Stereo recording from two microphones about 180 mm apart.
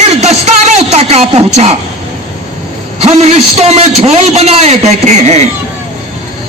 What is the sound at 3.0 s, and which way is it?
A man's voice, 35° right (ahead or behind).